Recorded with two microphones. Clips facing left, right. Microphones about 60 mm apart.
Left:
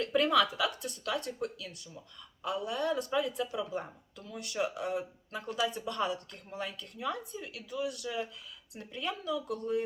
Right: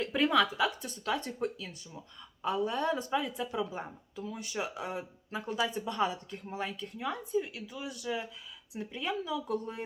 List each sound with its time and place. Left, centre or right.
0.0 s speech: centre
9.3 s speech: right